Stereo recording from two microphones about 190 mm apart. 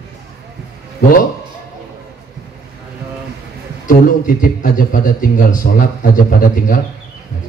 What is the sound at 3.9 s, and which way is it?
A man's voice, 45° left (ahead or behind).